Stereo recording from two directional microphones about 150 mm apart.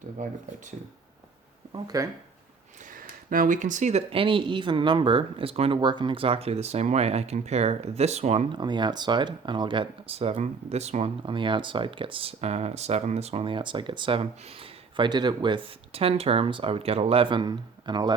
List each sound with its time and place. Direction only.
0.2 s speech: 60° right (ahead or behind)
1.7 s speech: 25° right (ahead or behind)
3.2 s speech: 65° right (ahead or behind); by 8.4 s 45° right (ahead or behind)
8.5 s speech: 30° right (ahead or behind)